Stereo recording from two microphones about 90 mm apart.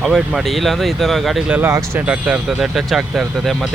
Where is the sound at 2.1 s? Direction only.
10° right (ahead or behind).